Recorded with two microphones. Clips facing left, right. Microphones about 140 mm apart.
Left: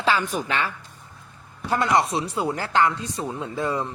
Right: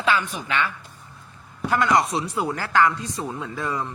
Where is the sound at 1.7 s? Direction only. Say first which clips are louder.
Right 1 dB; 25° left (ahead or behind).